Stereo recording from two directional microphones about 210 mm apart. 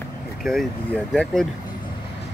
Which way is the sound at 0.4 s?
Centre (ahead or behind).